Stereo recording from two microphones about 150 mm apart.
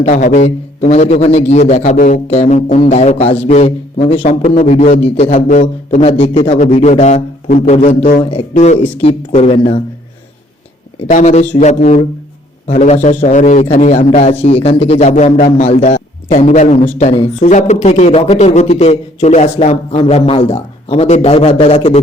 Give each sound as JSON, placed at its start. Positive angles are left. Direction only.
{"t": 0.0, "sound": "speech", "side_deg": 60}
{"t": 2.2, "sound": "speech", "side_deg": 45}
{"t": 5.5, "sound": "speech", "side_deg": 55}
{"t": 6.0, "sound": "speech", "side_deg": 40}
{"t": 7.6, "sound": "speech", "side_deg": 45}
{"t": 8.8, "sound": "speech", "side_deg": 40}
{"t": 11.1, "sound": "speech", "side_deg": 55}
{"t": 12.6, "sound": "a man's voice", "side_deg": 50}